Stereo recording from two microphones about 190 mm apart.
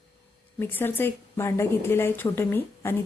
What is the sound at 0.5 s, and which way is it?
A woman's voice, 10° left (ahead or behind).